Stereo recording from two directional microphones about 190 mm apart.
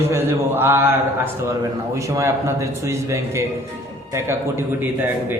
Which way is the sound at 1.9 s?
15° right (ahead or behind).